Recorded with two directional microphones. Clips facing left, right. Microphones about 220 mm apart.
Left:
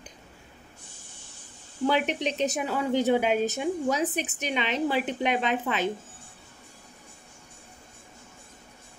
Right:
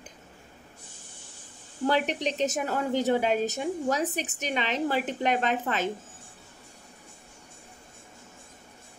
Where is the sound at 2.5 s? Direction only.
40° right (ahead or behind).